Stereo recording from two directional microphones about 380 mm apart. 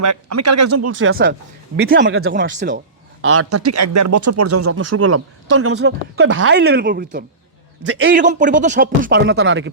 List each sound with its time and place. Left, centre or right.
0.0 s speech: right
3.2 s speech: right
7.9 s speech: right
8.1 s speech: centre